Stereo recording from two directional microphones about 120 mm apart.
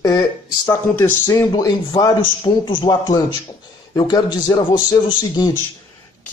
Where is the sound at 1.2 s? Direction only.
30° left (ahead or behind).